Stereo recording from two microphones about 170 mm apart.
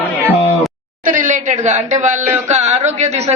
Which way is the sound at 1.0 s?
50° right (ahead or behind).